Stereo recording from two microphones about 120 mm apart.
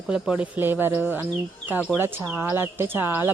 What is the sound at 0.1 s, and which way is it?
Speech, 5° right (ahead or behind).